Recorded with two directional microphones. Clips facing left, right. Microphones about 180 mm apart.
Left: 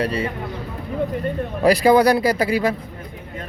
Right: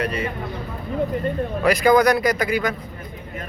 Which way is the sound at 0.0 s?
30° left (ahead or behind).